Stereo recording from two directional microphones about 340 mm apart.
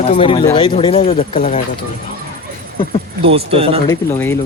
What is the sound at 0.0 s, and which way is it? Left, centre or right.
Speech, centre.